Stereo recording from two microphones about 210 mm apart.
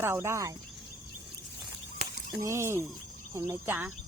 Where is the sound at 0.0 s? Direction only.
10° right (ahead or behind).